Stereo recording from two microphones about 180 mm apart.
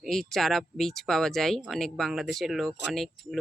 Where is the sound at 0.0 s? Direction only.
Centre (ahead or behind).